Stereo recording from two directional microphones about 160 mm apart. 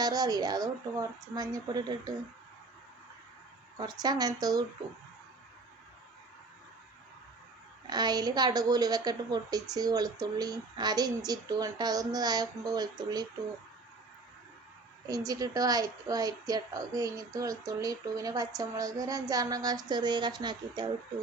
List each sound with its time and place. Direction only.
0.0 s a woman's voice: 25° right (ahead or behind)
3.8 s a woman's voice: 25° right (ahead or behind)
7.9 s a woman's voice: 25° right (ahead or behind)
15.0 s a woman's voice: 20° right (ahead or behind)